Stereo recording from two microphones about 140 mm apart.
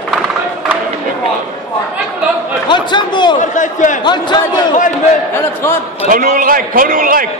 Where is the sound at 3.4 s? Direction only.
65° left (ahead or behind).